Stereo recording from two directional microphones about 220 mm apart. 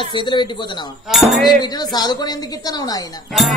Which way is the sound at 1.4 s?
20° left (ahead or behind).